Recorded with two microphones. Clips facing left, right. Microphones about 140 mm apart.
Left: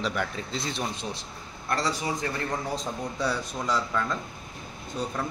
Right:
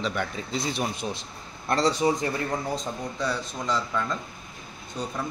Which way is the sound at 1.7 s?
25° right (ahead or behind).